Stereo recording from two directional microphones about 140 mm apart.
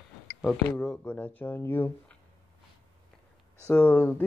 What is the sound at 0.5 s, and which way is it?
Speech, 5° left (ahead or behind).